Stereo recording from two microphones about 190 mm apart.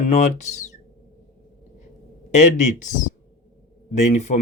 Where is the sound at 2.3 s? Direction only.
40° left (ahead or behind).